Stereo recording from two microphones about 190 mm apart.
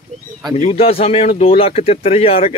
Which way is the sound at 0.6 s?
35° left (ahead or behind).